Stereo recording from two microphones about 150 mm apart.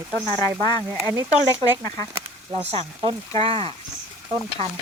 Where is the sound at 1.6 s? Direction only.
20° left (ahead or behind).